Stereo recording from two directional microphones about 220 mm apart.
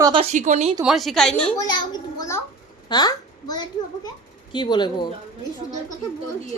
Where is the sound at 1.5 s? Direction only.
20° left (ahead or behind).